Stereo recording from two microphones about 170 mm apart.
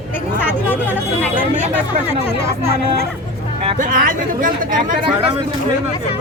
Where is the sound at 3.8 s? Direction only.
55° right (ahead or behind).